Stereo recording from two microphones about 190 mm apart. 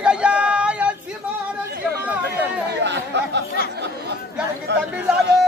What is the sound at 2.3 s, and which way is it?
Speech, 65° right (ahead or behind).